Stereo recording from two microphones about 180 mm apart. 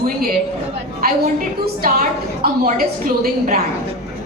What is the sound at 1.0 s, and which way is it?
A woman's voice, 55° right (ahead or behind).